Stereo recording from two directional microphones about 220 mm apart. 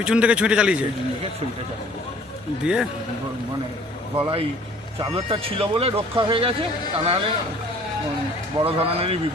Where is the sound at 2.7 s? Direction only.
5° right (ahead or behind).